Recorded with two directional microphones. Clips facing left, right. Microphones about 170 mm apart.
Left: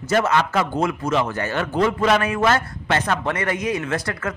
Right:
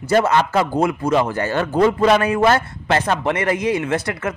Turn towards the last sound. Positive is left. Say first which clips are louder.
# right 3 dB
turn(degrees=-20)  # may be behind; listen again after turning